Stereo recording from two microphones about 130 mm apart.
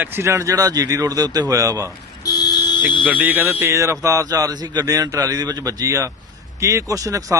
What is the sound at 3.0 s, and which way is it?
A man's voice, 10° right (ahead or behind).